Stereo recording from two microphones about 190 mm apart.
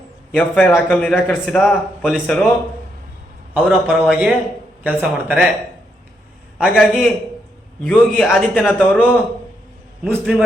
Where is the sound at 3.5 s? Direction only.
Centre (ahead or behind).